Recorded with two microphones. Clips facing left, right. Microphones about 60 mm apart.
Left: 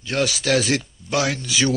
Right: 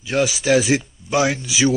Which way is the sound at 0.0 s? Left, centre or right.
Centre.